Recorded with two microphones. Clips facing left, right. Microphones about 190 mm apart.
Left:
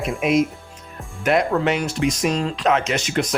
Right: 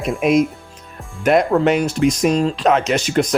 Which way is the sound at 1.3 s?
40° right (ahead or behind).